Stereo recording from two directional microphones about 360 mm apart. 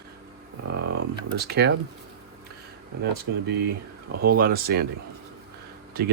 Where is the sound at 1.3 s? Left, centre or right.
Right.